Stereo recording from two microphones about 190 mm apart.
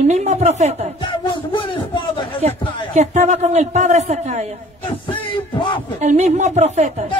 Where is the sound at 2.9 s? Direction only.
35° right (ahead or behind).